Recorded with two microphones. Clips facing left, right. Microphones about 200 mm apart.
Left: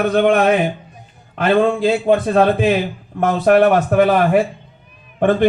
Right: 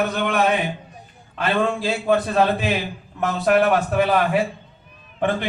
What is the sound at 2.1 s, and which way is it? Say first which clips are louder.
A man's voice: left 3 dB; 50° left (ahead or behind).